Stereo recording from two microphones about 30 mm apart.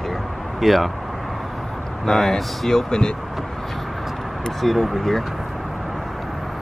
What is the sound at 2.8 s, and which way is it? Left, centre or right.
Speech, left.